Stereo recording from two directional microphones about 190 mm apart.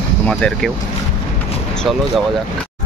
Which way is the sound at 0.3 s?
5° left (ahead or behind).